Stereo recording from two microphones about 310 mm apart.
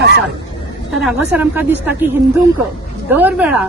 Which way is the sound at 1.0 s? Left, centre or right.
Centre.